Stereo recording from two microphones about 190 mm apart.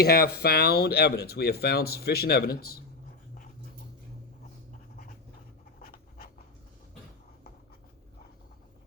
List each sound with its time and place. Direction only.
0.0 s speech: 55° left (ahead or behind)
5.8 s writing: 50° left (ahead or behind)